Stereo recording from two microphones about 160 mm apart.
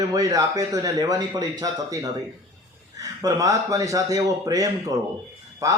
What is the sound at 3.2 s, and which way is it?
A man's voice, 20° right (ahead or behind).